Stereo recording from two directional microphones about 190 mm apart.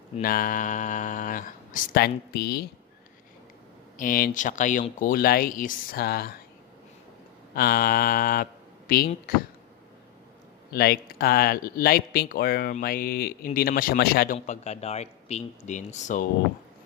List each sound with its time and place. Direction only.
0.2 s speech: 50° left (ahead or behind)
3.9 s speech: 45° left (ahead or behind)
7.5 s speech: 55° left (ahead or behind)
10.7 s speech: 55° left (ahead or behind)
14.3 s speech: 35° left (ahead or behind)